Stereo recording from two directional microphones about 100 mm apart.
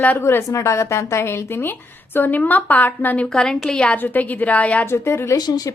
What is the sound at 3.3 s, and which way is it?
A woman's voice, 5° left (ahead or behind).